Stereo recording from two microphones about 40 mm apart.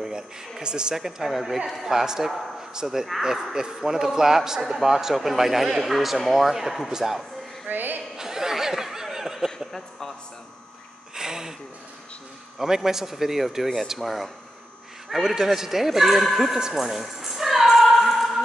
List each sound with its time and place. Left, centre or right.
0.0 s a sound: right
0.9 s speech: centre
7.6 s a sound: right
8.2 s laughter: centre
9.7 s speech: centre
11.1 s speech: centre
12.5 s speech: centre
16.7 s music: centre